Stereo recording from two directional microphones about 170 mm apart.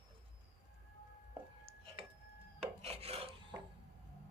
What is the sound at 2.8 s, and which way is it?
Filing, 35° right (ahead or behind).